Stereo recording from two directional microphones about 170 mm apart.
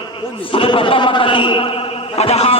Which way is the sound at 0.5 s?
30° left (ahead or behind).